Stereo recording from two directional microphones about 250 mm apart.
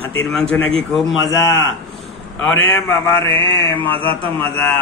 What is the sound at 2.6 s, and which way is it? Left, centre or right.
Speech, centre.